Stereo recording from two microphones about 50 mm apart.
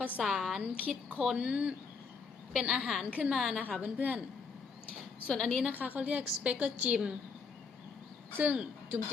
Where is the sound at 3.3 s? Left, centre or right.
Centre.